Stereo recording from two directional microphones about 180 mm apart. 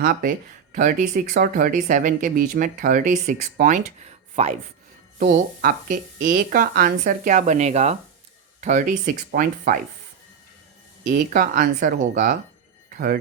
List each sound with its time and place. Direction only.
0.0 s speech: 50° right (ahead or behind)
5.2 s speech: 50° right (ahead or behind)
8.6 s speech: 45° right (ahead or behind)
11.1 s speech: 55° right (ahead or behind)
12.9 s music: 50° right (ahead or behind)